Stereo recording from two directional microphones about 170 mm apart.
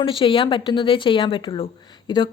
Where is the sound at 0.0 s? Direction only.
30° left (ahead or behind).